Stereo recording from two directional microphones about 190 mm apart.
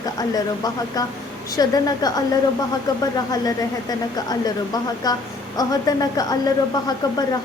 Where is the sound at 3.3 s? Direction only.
20° left (ahead or behind).